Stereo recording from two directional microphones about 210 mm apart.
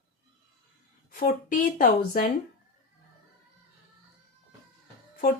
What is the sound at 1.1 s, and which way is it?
A woman's voice, 40° left (ahead or behind).